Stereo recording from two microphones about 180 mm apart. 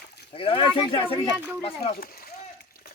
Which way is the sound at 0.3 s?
30° left (ahead or behind).